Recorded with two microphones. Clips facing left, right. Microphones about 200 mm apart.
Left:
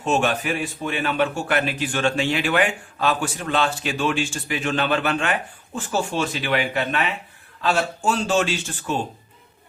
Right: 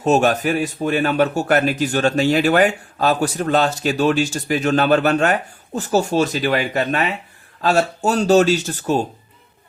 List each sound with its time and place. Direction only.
0.0 s a man's voice: 40° right (ahead or behind)